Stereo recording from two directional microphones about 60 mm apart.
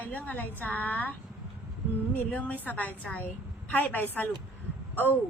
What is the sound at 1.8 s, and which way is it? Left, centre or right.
Speech, right.